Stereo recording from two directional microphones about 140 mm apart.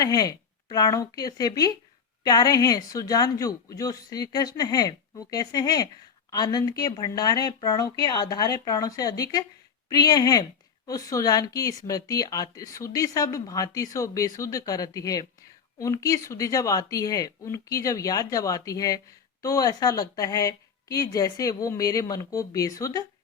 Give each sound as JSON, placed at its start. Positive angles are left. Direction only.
{"t": 0.0, "sound": "speech", "side_deg": 25}